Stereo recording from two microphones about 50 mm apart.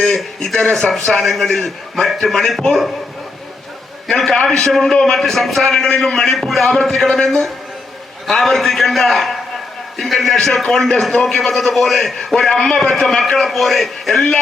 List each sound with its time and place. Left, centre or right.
0.3 s a man's voice: centre
4.6 s a man's voice: centre